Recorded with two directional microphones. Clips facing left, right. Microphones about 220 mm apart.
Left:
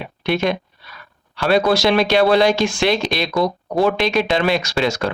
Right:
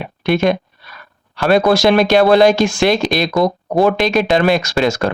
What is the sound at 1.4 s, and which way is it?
Speech, 50° right (ahead or behind).